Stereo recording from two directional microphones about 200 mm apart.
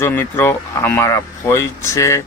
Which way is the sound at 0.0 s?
10° left (ahead or behind).